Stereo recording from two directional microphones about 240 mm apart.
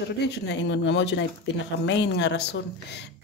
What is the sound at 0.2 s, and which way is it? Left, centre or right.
Speech, left.